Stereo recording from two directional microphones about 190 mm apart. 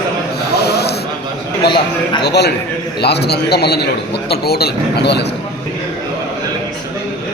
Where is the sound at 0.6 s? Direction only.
60° left (ahead or behind).